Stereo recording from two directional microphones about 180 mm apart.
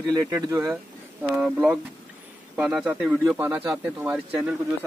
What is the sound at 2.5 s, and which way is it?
A man's voice, 5° right (ahead or behind).